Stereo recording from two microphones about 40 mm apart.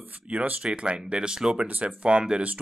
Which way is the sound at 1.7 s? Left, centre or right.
Right.